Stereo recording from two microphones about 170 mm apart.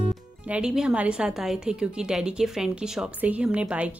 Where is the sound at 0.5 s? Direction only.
5° right (ahead or behind).